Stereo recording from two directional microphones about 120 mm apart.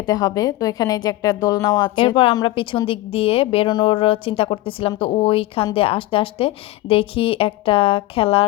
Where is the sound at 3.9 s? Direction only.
50° left (ahead or behind).